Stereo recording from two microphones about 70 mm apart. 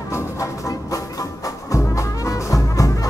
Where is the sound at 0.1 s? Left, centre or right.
Left.